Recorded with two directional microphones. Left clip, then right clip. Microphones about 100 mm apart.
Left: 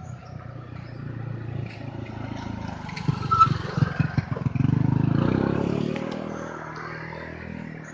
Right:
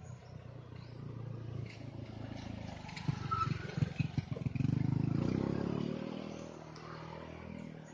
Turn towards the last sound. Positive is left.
turn(degrees=-5)  # may be behind; listen again after turning